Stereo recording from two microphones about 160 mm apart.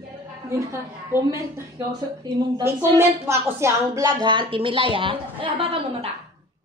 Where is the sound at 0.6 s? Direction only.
20° right (ahead or behind); by 5.8 s 35° right (ahead or behind).